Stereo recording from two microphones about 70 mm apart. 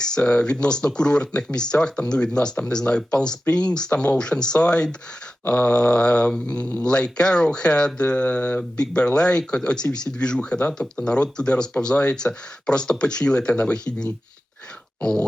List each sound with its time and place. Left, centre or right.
0.0 s speech: centre